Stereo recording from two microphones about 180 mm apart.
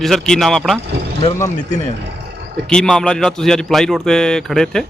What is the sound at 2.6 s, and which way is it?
Speech, 5° left (ahead or behind).